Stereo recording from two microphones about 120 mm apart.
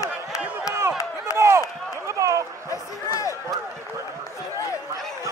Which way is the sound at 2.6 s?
30° left (ahead or behind).